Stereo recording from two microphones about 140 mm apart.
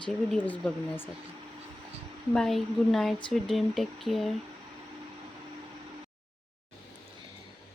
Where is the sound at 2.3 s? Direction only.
5° left (ahead or behind).